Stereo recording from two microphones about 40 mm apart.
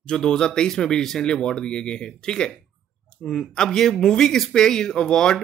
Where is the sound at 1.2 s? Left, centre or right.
Left.